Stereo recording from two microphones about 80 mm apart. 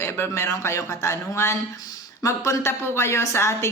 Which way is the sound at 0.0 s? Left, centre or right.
Left.